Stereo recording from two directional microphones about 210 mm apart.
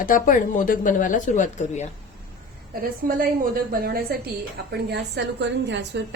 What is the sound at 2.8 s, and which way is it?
A woman's voice, 40° right (ahead or behind).